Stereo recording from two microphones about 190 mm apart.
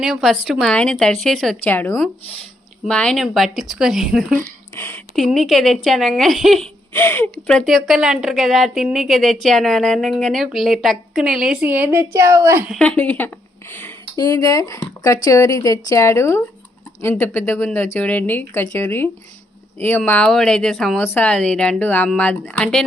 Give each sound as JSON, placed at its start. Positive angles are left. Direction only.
{"t": 0.0, "sound": "speech", "side_deg": 0}
{"t": 4.4, "sound": "speech", "side_deg": 10}
{"t": 5.1, "sound": "speech", "side_deg": 0}
{"t": 6.9, "sound": "speech", "side_deg": 10}
{"t": 12.8, "sound": "speech", "side_deg": 5}